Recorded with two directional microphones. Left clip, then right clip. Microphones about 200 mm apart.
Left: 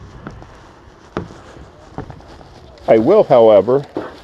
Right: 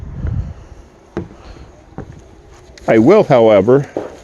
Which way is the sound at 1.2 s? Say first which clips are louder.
Even; 55° left (ahead or behind).